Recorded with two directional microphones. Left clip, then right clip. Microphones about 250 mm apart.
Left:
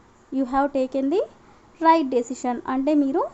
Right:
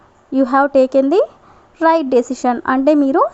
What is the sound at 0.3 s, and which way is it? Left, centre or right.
A woman's voice, right.